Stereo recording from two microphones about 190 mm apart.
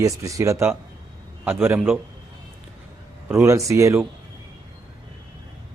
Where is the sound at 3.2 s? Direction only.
15° right (ahead or behind).